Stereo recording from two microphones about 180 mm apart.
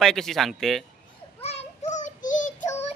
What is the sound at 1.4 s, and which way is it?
Child singing, 35° left (ahead or behind).